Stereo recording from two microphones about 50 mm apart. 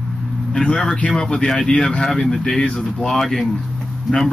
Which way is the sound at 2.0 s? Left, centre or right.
Centre.